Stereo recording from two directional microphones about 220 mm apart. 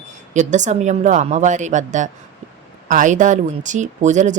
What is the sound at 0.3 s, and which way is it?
Speech, 35° right (ahead or behind).